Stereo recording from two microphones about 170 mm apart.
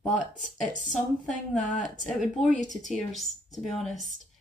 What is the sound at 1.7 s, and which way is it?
Speech, 45° left (ahead or behind).